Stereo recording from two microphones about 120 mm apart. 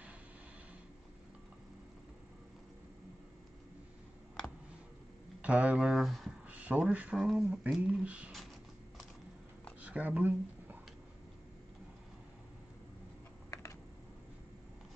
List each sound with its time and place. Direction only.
5.4 s speech: 10° right (ahead or behind)
6.5 s speech: 10° right (ahead or behind)
7.4 s speech: 15° right (ahead or behind)
9.8 s a sound: 10° right (ahead or behind)
13.5 s typing: 25° left (ahead or behind)